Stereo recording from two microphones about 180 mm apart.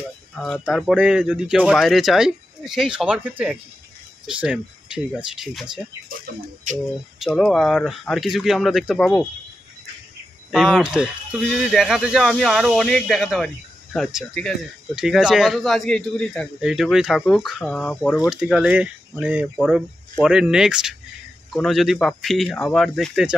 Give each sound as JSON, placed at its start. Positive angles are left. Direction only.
{"t": 0.4, "sound": "speech", "side_deg": 0}
{"t": 6.7, "sound": "speech", "side_deg": -45}
{"t": 7.2, "sound": "speech", "side_deg": 0}
{"t": 10.5, "sound": "speech", "side_deg": -5}
{"t": 18.2, "sound": "speech", "side_deg": -5}